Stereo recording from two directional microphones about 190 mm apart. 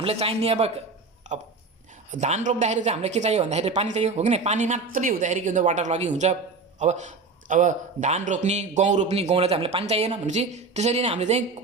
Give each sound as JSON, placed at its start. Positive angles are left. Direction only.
{"t": 0.0, "sound": "a man's voice", "side_deg": -30}
{"t": 1.2, "sound": "a sound", "side_deg": -40}
{"t": 2.2, "sound": "a man's voice", "side_deg": -40}